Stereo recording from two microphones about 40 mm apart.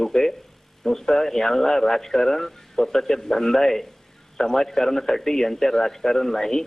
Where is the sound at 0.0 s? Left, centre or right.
Centre.